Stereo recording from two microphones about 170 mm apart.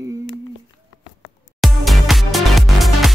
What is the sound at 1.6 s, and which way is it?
Music, centre (ahead or behind).